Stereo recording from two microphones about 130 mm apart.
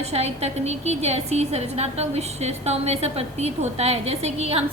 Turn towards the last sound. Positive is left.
turn(degrees=-50)  # may be behind; listen again after turning